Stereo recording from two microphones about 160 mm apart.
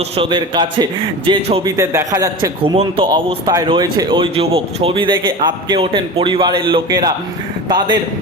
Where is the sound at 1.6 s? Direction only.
20° right (ahead or behind).